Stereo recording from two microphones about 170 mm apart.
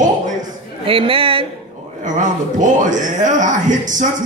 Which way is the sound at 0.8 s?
30° right (ahead or behind).